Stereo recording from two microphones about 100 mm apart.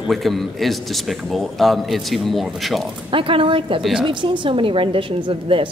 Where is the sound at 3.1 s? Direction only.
60° right (ahead or behind).